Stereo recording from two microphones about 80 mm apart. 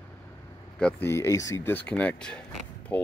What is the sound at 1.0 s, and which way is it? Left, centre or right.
Speech, left.